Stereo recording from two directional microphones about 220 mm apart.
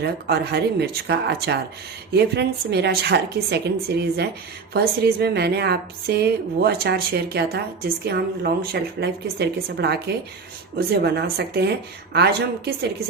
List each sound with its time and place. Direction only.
0.0 s a woman's voice: 45° right (ahead or behind)